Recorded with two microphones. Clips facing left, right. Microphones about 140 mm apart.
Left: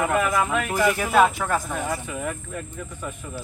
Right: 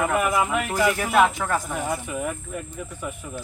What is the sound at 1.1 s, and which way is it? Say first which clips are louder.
Speech: left 1 dB; centre (ahead or behind).